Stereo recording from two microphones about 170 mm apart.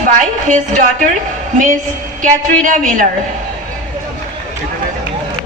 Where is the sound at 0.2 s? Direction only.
45° right (ahead or behind).